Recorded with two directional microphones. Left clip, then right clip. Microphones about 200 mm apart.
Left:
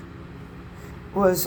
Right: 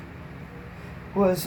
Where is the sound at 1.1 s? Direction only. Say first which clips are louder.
Left 2 dB; 30° left (ahead or behind).